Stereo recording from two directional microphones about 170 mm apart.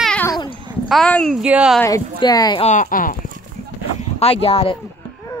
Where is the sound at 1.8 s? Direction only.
15° left (ahead or behind).